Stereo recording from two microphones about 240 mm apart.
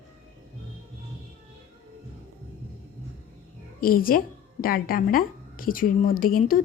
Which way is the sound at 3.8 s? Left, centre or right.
Left.